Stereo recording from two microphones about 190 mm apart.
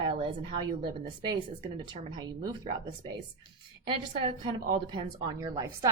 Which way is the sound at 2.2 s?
25° right (ahead or behind).